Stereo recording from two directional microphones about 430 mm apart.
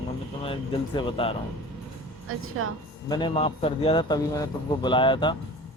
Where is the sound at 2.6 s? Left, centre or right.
Right.